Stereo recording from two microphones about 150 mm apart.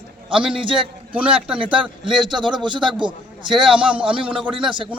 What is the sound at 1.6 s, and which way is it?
A man's voice, 35° right (ahead or behind).